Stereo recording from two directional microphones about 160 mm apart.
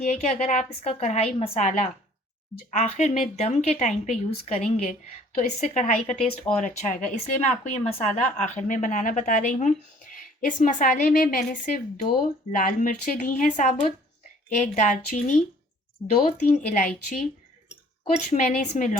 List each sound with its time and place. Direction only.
0.0 s a woman's voice: 45° left (ahead or behind)
8.2 s a woman's voice: 50° left (ahead or behind)
18.3 s a woman's voice: 50° left (ahead or behind)